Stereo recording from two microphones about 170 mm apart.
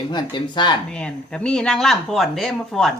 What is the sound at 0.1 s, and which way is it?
Speech, 25° left (ahead or behind).